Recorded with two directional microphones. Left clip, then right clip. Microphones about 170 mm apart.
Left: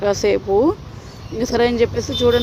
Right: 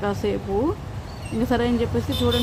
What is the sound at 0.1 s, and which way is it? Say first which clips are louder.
Speech: left 8 dB; 45° left (ahead or behind).